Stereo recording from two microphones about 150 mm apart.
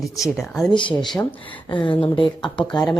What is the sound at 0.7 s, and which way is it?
Speech, 35° left (ahead or behind).